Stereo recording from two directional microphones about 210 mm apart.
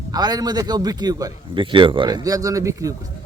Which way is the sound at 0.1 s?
20° right (ahead or behind).